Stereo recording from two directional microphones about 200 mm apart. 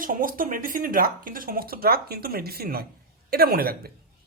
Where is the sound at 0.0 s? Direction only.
45° right (ahead or behind).